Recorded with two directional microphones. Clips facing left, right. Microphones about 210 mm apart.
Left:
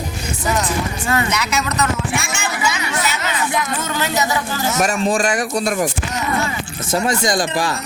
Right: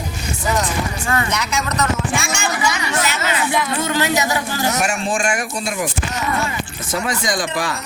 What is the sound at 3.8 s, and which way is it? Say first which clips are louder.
Speech: right 2 dB; 15° right (ahead or behind).